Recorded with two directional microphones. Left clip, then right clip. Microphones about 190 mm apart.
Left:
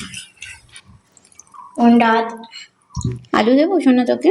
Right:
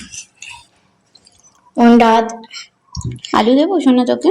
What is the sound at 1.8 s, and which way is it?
Speech, 50° right (ahead or behind).